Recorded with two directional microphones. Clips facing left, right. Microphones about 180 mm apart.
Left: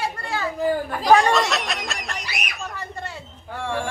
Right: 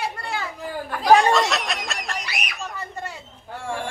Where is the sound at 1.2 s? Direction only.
Centre (ahead or behind).